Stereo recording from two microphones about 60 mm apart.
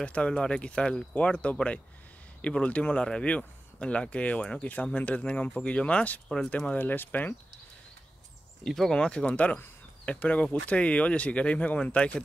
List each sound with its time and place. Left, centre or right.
0.0 s speech: centre
8.6 s speech: centre
9.2 s speech: left